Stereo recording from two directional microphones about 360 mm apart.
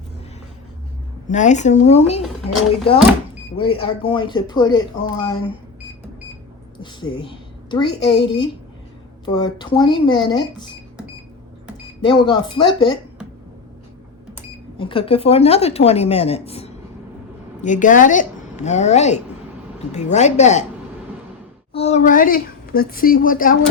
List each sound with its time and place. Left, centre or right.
1.3 s a woman's voice: centre
3.6 s a woman's voice: centre
6.7 s a woman's voice: centre
12.0 s a woman's voice: centre
14.8 s a woman's voice: centre
21.7 s a woman's voice: centre